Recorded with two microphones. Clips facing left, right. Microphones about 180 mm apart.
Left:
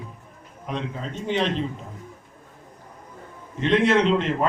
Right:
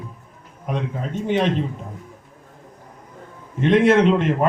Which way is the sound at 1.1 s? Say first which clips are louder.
Right 4 dB; 50° right (ahead or behind).